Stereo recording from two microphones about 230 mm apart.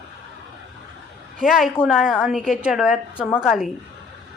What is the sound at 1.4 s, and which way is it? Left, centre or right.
A woman's voice, centre.